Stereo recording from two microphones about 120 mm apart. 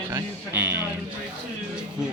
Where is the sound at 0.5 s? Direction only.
20° right (ahead or behind).